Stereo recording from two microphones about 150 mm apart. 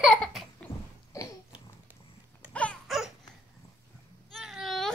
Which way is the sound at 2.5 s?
5° left (ahead or behind).